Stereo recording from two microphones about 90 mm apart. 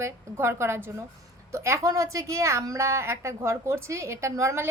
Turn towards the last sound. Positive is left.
turn(degrees=-30)  # may be behind; listen again after turning